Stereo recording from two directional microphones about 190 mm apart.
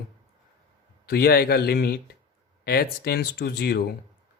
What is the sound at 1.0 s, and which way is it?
Speech, 55° left (ahead or behind).